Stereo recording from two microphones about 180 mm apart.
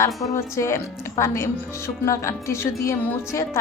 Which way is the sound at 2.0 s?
15° left (ahead or behind).